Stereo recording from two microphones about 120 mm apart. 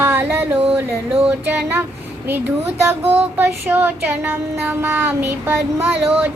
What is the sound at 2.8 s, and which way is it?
Child singing, 15° right (ahead or behind).